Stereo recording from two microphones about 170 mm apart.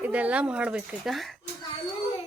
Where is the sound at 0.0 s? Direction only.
10° right (ahead or behind).